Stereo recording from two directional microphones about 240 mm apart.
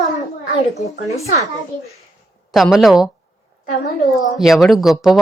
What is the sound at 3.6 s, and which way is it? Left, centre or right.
Speech, left.